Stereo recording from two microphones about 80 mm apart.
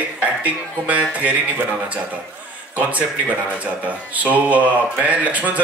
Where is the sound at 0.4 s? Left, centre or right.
Centre.